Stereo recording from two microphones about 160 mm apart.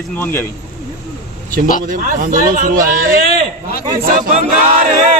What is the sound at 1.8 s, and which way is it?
Speech, 60° right (ahead or behind).